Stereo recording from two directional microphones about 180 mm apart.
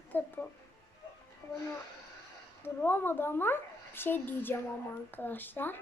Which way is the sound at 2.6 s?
10° left (ahead or behind).